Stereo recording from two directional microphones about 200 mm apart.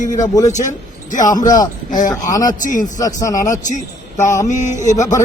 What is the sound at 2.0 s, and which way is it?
Speech, 20° left (ahead or behind).